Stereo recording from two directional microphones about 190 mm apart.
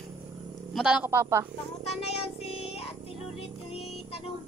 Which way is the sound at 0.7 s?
5° right (ahead or behind).